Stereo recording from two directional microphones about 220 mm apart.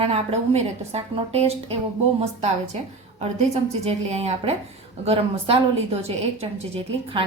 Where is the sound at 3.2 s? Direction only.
30° right (ahead or behind).